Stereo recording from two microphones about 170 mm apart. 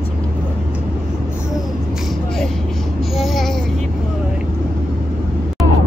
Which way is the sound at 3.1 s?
Centre (ahead or behind).